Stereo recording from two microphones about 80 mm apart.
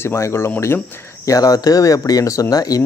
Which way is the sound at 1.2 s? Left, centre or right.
Left.